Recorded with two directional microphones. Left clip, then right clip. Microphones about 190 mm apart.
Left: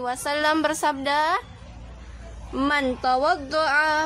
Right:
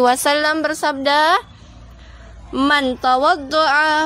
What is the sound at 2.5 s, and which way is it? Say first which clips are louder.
Speech: right 7 dB; 35° right (ahead or behind).